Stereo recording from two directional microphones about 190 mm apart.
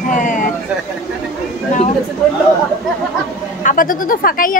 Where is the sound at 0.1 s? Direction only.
40° left (ahead or behind).